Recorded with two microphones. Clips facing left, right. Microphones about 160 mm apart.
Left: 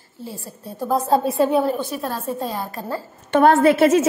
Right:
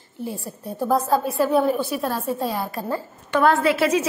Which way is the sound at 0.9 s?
25° left (ahead or behind).